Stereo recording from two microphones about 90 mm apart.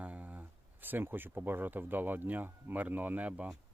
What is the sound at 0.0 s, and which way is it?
Speech, 15° right (ahead or behind).